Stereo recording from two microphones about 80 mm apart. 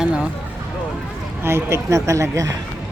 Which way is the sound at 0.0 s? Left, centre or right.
Centre.